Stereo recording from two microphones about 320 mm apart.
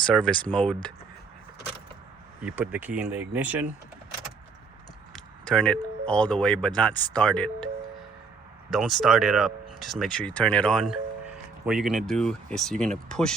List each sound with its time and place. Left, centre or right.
0.0 s speech: centre
2.4 s speech: centre
5.1 s speech: centre
8.7 s speech: centre